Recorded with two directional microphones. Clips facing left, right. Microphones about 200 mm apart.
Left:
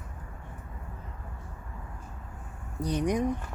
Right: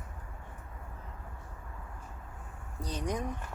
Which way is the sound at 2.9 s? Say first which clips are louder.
Left 7 dB; 15° left (ahead or behind).